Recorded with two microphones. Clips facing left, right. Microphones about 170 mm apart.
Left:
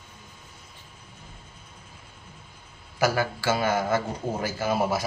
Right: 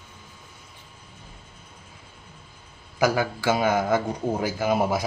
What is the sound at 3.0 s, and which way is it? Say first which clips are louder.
A man's voice: right 2 dB; 15° right (ahead or behind).